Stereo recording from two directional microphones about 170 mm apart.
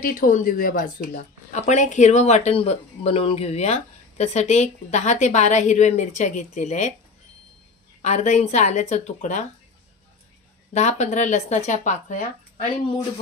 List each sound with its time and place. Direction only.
0.0 s speech: 55° left (ahead or behind)
8.0 s speech: 45° left (ahead or behind)
10.7 s speech: 45° left (ahead or behind)